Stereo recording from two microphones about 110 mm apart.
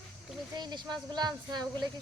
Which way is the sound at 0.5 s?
40° right (ahead or behind).